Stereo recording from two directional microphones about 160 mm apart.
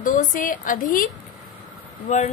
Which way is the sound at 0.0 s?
55° left (ahead or behind).